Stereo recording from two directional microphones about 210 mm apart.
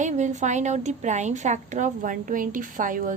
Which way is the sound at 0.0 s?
35° right (ahead or behind).